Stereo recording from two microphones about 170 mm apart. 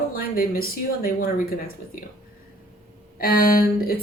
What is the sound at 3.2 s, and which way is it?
Speech, 60° left (ahead or behind).